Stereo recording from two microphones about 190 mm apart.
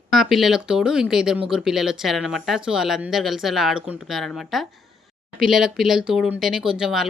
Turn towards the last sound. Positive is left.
turn(degrees=0)  # may be behind; listen again after turning